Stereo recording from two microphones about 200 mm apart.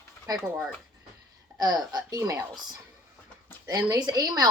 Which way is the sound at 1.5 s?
20° right (ahead or behind).